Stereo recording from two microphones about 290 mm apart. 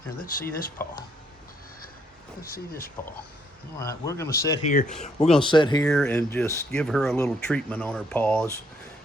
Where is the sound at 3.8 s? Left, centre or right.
Centre.